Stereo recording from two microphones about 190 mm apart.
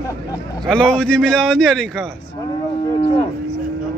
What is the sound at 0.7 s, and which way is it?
A man's voice, 5° left (ahead or behind).